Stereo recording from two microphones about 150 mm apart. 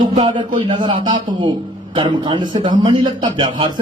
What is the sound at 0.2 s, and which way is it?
A man's voice, 35° right (ahead or behind).